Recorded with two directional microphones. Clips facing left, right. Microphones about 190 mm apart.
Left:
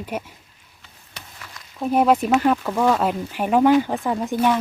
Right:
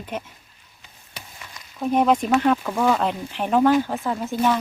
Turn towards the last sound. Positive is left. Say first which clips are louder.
# left 2 dB
turn(degrees=10)  # may be behind; listen again after turning